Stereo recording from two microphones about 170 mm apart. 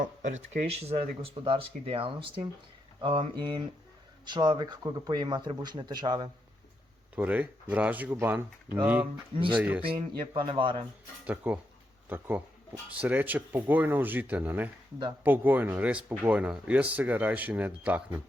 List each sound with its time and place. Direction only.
0.0 s speech: 50° right (ahead or behind); by 6.3 s 25° right (ahead or behind)
7.2 s speech: 10° right (ahead or behind)
9.3 s speech: 30° right (ahead or behind)
9.6 s speech: 10° right (ahead or behind)
9.8 s speech: 30° right (ahead or behind)
11.3 s speech: 10° right (ahead or behind)